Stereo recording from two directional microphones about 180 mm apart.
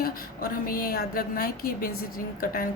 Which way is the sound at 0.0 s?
55° left (ahead or behind).